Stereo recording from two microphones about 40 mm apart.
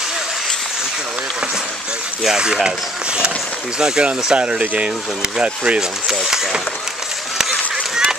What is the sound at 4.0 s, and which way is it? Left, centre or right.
Speech, right.